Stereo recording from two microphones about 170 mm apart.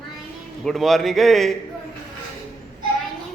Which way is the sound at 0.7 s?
Centre (ahead or behind).